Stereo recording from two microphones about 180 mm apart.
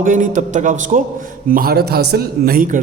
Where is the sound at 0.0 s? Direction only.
45° right (ahead or behind).